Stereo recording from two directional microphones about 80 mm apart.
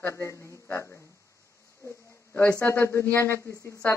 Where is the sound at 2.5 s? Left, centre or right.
Left.